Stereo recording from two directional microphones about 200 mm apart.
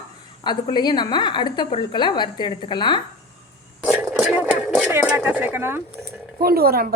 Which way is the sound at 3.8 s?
5° right (ahead or behind).